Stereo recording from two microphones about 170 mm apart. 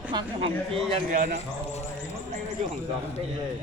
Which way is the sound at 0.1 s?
25° right (ahead or behind).